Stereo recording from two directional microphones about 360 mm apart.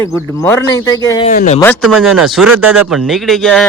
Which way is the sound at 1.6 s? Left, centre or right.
Centre.